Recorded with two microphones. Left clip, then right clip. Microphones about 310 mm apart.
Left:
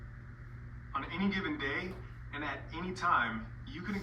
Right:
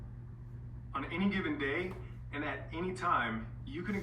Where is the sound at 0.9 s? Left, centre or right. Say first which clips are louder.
Even; left.